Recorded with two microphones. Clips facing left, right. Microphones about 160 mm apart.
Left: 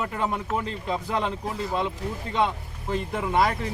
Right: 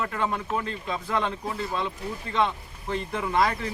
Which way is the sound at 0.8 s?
30° left (ahead or behind).